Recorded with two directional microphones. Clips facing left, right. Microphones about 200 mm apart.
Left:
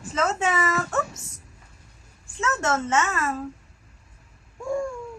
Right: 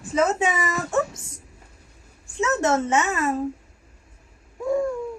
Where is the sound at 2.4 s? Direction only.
20° right (ahead or behind).